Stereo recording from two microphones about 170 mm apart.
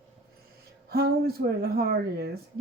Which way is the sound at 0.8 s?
65° right (ahead or behind).